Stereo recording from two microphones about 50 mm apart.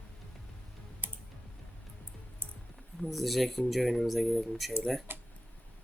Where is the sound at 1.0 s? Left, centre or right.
Right.